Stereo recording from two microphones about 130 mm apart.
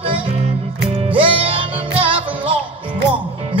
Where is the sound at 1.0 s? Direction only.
45° right (ahead or behind).